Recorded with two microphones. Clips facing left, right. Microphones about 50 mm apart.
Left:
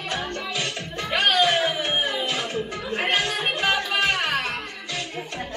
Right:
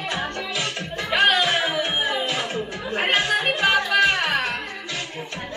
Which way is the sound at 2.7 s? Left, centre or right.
Centre.